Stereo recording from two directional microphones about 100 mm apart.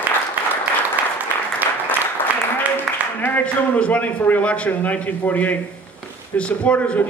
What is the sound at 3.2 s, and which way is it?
A man's voice, 20° left (ahead or behind).